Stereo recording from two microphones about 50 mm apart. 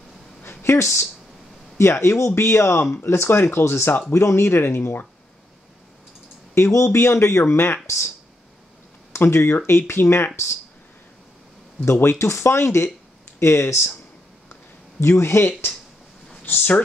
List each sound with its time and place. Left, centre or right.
0.4 s a sound: left
0.7 s speech: left
6.5 s speech: left
7.8 s speech: left
9.2 s speech: left
11.8 s speech: left
14.5 s a sound: left
16.5 s speech: left